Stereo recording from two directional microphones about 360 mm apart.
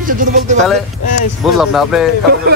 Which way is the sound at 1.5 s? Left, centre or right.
Centre.